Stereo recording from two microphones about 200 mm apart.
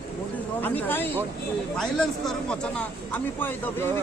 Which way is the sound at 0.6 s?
10° left (ahead or behind).